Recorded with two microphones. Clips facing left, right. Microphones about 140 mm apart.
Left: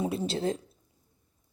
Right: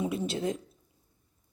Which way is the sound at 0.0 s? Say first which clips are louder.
Left 1 dB; 30° left (ahead or behind).